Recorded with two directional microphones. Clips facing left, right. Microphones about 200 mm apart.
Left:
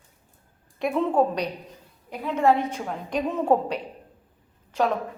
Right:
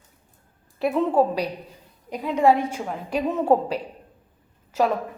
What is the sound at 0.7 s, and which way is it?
A woman's voice, centre (ahead or behind).